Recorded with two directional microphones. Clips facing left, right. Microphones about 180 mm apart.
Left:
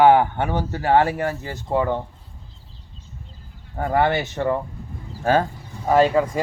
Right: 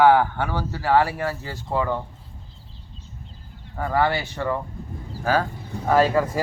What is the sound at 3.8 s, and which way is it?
Speech, 25° left (ahead or behind).